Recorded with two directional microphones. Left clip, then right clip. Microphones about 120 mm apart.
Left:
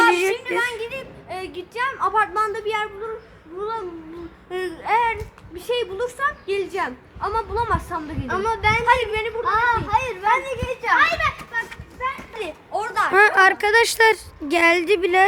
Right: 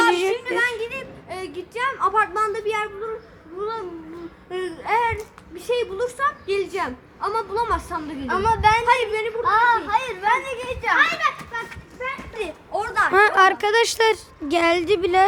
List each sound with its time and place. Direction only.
0.1 s a sound: 10° left (ahead or behind)
3.6 s a woman's voice: 5° left (ahead or behind)
8.3 s a woman's voice: 50° right (ahead or behind)
8.8 s speech: 10° left (ahead or behind)
9.4 s a child's voice: 40° right (ahead or behind)
12.4 s speech: 10° left (ahead or behind)